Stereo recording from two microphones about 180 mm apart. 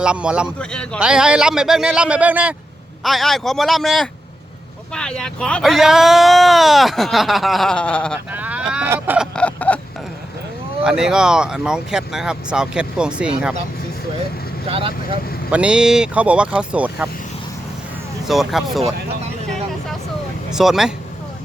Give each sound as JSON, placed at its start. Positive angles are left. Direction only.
{"t": 0.0, "sound": "speech", "side_deg": -5}
{"t": 8.3, "sound": "vehicle", "side_deg": -10}
{"t": 9.3, "sound": "a sound", "side_deg": 5}
{"t": 10.8, "sound": "speech", "side_deg": -5}
{"t": 14.7, "sound": "speech", "side_deg": -30}
{"t": 15.4, "sound": "speech", "side_deg": -5}
{"t": 18.3, "sound": "speech", "side_deg": 0}
{"t": 20.5, "sound": "speech", "side_deg": 0}